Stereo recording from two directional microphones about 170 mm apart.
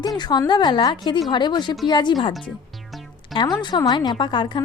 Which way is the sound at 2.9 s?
Centre (ahead or behind).